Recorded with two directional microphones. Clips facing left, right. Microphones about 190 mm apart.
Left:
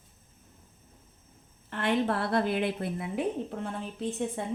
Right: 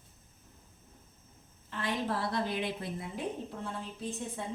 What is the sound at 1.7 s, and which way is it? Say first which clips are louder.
A woman's voice: left 6 dB; 60° left (ahead or behind).